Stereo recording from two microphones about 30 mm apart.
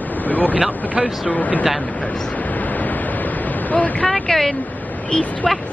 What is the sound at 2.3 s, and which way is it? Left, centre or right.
Waves, left.